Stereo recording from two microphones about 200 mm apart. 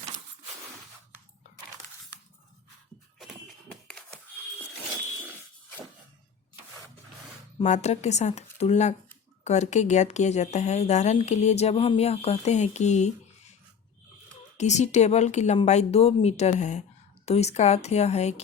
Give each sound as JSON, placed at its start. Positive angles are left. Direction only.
{"t": 3.2, "sound": "a sound", "side_deg": 0}
{"t": 7.6, "sound": "a woman's voice", "side_deg": 35}
{"t": 14.6, "sound": "a woman's voice", "side_deg": 35}